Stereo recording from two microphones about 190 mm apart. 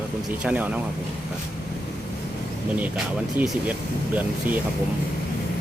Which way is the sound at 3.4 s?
5° right (ahead or behind).